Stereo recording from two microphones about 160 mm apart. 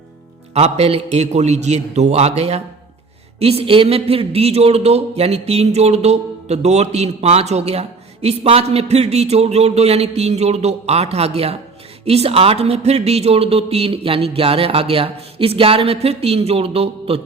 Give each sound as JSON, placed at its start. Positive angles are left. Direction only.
{"t": 0.5, "sound": "a man's voice", "side_deg": -40}